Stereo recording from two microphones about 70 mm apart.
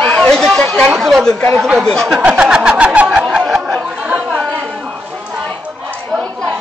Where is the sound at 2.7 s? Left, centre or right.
Centre.